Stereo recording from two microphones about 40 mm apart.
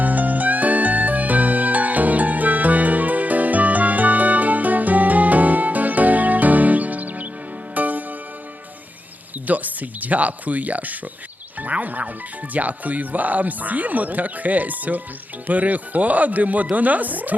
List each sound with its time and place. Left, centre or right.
0.0 s music: right
9.5 s speech: right